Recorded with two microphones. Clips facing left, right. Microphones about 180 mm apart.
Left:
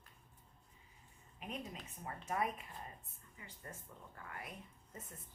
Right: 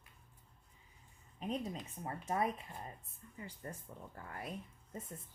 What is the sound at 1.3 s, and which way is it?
A woman's voice, 35° right (ahead or behind).